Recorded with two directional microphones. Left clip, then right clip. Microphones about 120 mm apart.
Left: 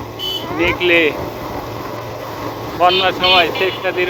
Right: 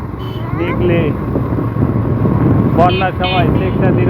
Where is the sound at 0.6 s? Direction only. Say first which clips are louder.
Left 2 dB; 45° left (ahead or behind).